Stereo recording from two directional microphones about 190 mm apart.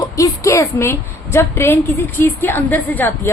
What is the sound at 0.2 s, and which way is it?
A woman's voice, 15° left (ahead or behind).